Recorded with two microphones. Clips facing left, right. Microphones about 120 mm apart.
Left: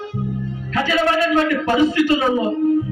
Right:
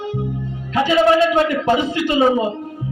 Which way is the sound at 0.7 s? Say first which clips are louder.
Right 4 dB; 20° right (ahead or behind).